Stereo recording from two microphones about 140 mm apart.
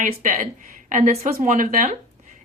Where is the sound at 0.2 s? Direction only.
65° right (ahead or behind).